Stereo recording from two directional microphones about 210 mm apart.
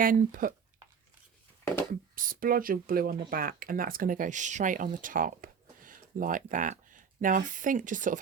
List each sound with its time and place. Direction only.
0.0 s speech: 40° right (ahead or behind)
2.1 s speech: 40° right (ahead or behind)